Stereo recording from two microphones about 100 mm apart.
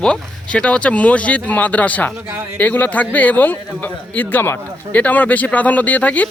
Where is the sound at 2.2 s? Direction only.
20° right (ahead or behind).